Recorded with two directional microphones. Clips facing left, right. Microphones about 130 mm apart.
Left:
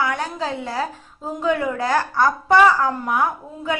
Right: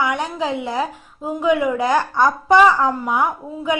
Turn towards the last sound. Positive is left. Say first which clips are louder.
# right 2 dB
turn(degrees=-15)  # may be behind; listen again after turning